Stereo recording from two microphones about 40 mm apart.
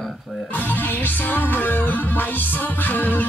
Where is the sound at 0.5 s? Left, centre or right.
Left.